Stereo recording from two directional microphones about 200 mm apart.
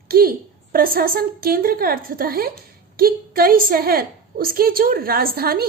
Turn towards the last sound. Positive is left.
turn(degrees=-50)  # may be behind; listen again after turning